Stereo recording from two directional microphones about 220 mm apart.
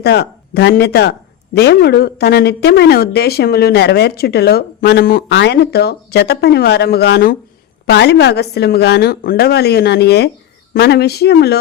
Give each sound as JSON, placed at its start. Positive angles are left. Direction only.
{"t": 0.0, "sound": "speech", "side_deg": 50}